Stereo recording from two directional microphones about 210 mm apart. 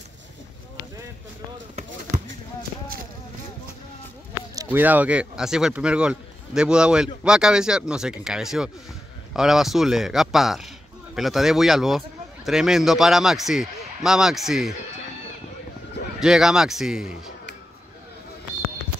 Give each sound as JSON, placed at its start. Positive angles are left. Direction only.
{"t": 1.8, "sound": "basketball bounce", "side_deg": -35}
{"t": 4.6, "sound": "a man's voice", "side_deg": -10}
{"t": 16.2, "sound": "a man's voice", "side_deg": 0}